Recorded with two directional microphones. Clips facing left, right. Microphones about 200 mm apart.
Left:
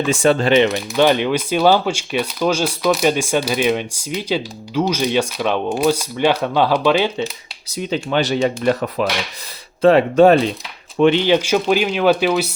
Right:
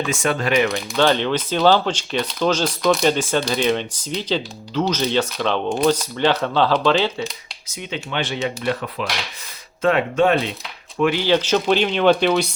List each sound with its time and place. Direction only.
0.1 s speech: 30° left (ahead or behind); by 7.1 s 10° left (ahead or behind)
7.7 s speech: 35° left (ahead or behind)
10.9 s speech: 25° left (ahead or behind); by 12.5 s 5° left (ahead or behind)